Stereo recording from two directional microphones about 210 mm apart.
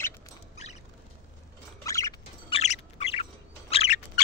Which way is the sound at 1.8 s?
15° left (ahead or behind).